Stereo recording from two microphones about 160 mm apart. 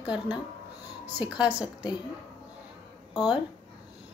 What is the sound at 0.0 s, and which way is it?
Speech, 25° left (ahead or behind).